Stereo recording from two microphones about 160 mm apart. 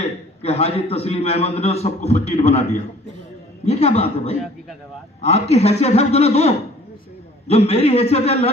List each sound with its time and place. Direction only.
0.0 s a man's voice: 40° left (ahead or behind)
3.7 s a man's voice: 40° left (ahead or behind)